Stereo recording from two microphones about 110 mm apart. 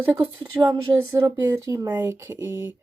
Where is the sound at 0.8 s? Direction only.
25° right (ahead or behind).